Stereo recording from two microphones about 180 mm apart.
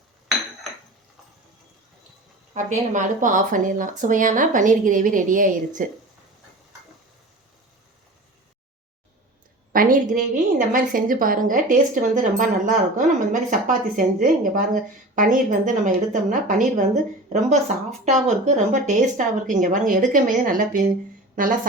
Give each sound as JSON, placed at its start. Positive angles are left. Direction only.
{"t": 2.6, "sound": "speech", "side_deg": -45}
{"t": 9.7, "sound": "speech", "side_deg": -50}